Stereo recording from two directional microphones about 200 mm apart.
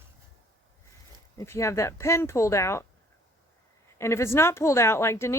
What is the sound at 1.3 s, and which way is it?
Speech, 15° left (ahead or behind).